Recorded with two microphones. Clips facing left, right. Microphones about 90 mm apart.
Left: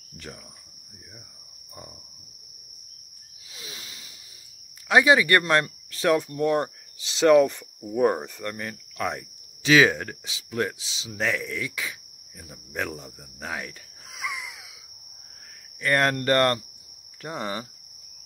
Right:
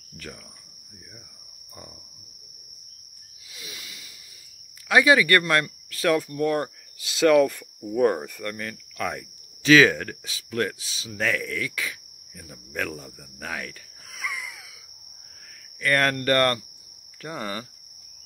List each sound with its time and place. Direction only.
3.5 s a sound: 30° left (ahead or behind)
4.8 s speech: 25° left (ahead or behind)
15.8 s speech: 20° left (ahead or behind)